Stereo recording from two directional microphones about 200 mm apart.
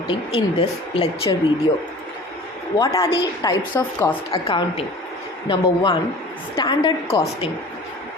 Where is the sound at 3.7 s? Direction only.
10° left (ahead or behind).